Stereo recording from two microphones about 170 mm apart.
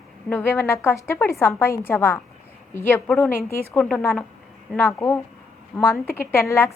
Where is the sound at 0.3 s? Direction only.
10° left (ahead or behind).